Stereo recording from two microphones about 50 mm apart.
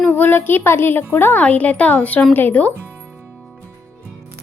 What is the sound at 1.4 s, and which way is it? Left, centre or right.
Speech, left.